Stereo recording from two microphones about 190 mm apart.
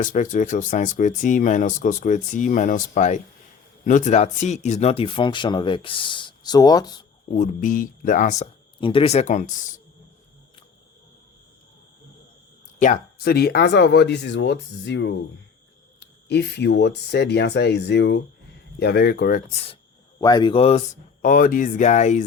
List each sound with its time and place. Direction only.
0.0 s speech: 45° left (ahead or behind); by 6.9 s 20° left (ahead or behind)
7.3 s speech: 40° left (ahead or behind)
8.8 s speech: 30° left (ahead or behind)
12.8 s speech: 50° left (ahead or behind)
19.6 s speech: 25° left (ahead or behind)